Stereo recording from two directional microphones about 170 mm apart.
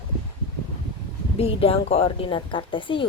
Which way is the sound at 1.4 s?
35° left (ahead or behind).